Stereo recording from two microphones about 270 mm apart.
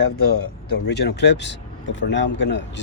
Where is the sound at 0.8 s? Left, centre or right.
Left.